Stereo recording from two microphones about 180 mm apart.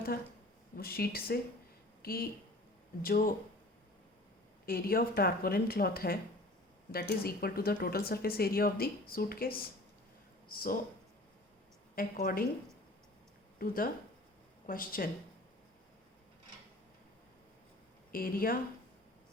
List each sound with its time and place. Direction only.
0.8 s a woman's voice: 55° left (ahead or behind)
4.6 s a woman's voice: 55° left (ahead or behind)
11.9 s a woman's voice: 50° left (ahead or behind)
13.6 s a woman's voice: 50° left (ahead or behind)
18.1 s a woman's voice: 55° left (ahead or behind)